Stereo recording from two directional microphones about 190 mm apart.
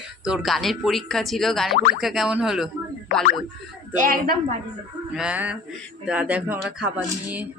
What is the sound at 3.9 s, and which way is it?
Speech, 45° right (ahead or behind).